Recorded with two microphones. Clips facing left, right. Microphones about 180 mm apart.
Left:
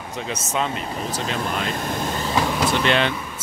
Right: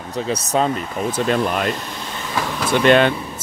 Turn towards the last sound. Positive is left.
turn(degrees=-50)  # may be behind; listen again after turning